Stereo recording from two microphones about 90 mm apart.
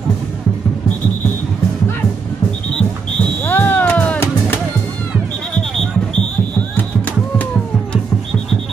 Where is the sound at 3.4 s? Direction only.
20° left (ahead or behind).